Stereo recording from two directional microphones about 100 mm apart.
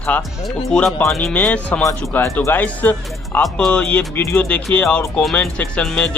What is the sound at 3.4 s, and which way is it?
A man's voice, 5° left (ahead or behind).